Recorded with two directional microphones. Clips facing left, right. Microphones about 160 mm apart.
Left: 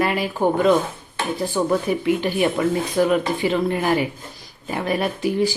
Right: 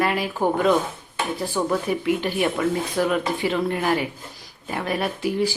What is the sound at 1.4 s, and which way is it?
Speech, 10° left (ahead or behind).